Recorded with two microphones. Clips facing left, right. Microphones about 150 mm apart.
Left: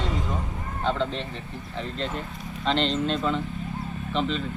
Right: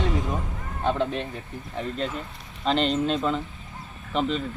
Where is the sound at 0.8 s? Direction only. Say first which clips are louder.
Right 2 dB; 10° right (ahead or behind).